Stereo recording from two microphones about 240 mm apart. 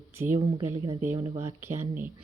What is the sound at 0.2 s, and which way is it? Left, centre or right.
Speech, centre.